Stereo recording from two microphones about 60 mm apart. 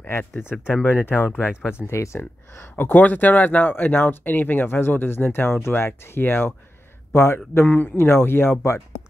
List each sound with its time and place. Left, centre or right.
0.1 s speech: left
1.5 s speech: centre
2.1 s speech: left
7.5 s speech: left